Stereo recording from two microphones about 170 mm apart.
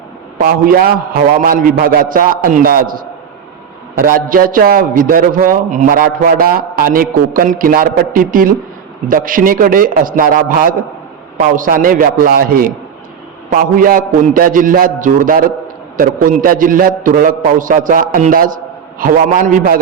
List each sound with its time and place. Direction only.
0.3 s a man's voice: 55° right (ahead or behind)